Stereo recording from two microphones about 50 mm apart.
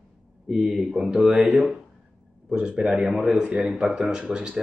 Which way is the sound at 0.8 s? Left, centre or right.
Centre.